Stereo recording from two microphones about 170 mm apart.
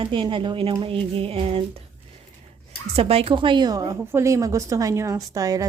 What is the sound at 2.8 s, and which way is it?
A woman's voice, 35° right (ahead or behind).